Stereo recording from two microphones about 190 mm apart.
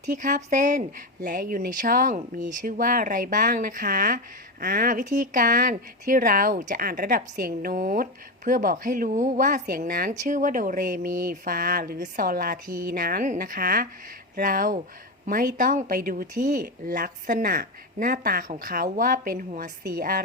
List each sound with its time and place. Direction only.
0.0 s a woman's voice: 45° right (ahead or behind)